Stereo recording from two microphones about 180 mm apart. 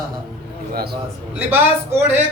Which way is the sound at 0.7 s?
60° right (ahead or behind).